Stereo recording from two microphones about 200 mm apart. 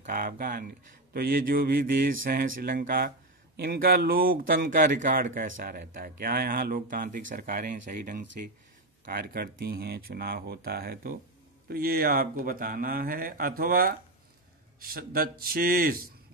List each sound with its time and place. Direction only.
0.0 s speech: 40° right (ahead or behind)